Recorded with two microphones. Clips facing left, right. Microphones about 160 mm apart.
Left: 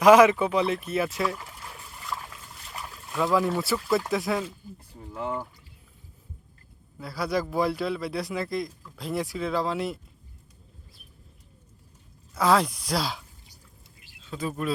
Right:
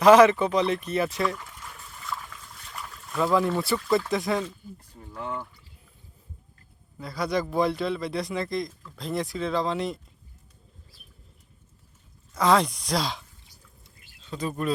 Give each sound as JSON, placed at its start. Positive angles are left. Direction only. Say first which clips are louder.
{"t": 0.0, "sound": "speech", "louder": "right 1 dB", "side_deg": 10}
{"t": 1.7, "sound": "a sound", "louder": "even", "side_deg": 10}
{"t": 3.3, "sound": "speech", "louder": "right 1 dB", "side_deg": 5}
{"t": 5.1, "sound": "speech", "louder": "left 3 dB", "side_deg": 35}
{"t": 7.0, "sound": "speech", "louder": "right 1 dB", "side_deg": 5}
{"t": 12.3, "sound": "speech", "louder": "right 1 dB", "side_deg": 5}